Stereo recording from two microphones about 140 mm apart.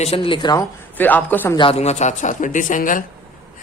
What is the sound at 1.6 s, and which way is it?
Speech, 45° left (ahead or behind).